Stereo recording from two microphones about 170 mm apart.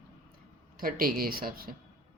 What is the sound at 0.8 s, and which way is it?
Speech, 60° right (ahead or behind).